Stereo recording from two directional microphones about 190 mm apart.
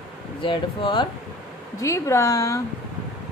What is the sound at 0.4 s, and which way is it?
Speech, 25° left (ahead or behind).